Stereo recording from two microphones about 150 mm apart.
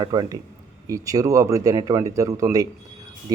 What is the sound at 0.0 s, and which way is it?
A man's voice, 30° right (ahead or behind).